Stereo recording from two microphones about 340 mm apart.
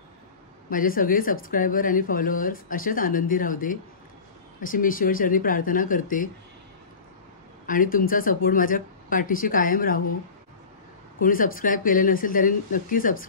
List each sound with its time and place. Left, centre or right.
0.7 s speech: left
7.6 s speech: left
11.1 s speech: left